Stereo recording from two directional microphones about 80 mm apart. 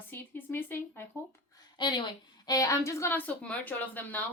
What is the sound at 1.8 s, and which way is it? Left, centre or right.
Speech, left.